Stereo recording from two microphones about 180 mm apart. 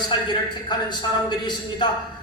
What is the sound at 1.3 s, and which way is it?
Speech, 25° left (ahead or behind).